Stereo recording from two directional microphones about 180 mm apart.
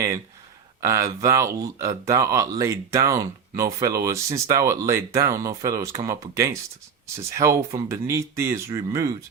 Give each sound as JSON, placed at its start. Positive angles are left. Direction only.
{"t": 0.8, "sound": "speech", "side_deg": -15}